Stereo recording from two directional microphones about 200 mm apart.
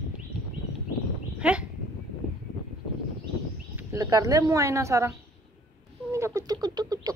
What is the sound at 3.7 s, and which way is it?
Speech, 15° right (ahead or behind).